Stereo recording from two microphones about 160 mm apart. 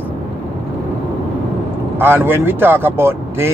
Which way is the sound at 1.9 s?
10° right (ahead or behind).